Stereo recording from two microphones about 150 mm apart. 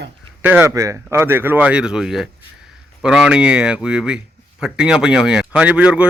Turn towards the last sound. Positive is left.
turn(degrees=-10)  # may be behind; listen again after turning